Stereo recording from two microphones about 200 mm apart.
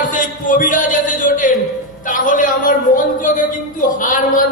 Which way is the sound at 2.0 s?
40° left (ahead or behind).